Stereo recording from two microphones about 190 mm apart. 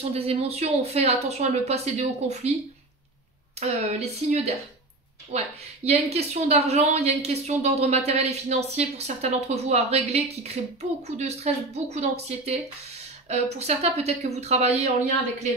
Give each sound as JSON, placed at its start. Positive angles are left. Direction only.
{"t": 0.1, "sound": "a woman's voice", "side_deg": -30}
{"t": 3.5, "sound": "a woman's voice", "side_deg": -35}
{"t": 5.9, "sound": "a woman's voice", "side_deg": -35}